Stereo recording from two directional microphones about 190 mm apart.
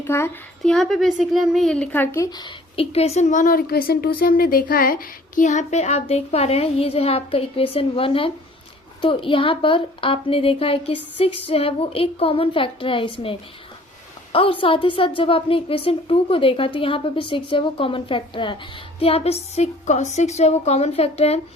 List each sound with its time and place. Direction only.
0.0 s speech: 15° left (ahead or behind)
0.6 s speech: centre (ahead or behind)
2.3 s a woman's voice: 25° left (ahead or behind)
14.3 s a woman's voice: 30° left (ahead or behind)